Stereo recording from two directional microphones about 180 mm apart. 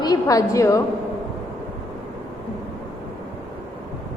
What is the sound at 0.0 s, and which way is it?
Speech, 20° left (ahead or behind).